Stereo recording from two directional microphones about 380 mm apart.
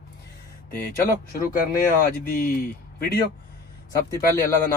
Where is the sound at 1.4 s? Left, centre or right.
Left.